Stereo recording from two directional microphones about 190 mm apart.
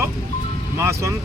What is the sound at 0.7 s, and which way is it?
Speech, 15° right (ahead or behind).